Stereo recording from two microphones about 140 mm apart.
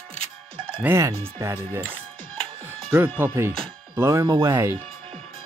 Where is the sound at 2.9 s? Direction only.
15° right (ahead or behind).